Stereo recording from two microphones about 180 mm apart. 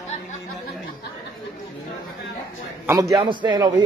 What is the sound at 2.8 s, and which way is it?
Speech, 15° right (ahead or behind).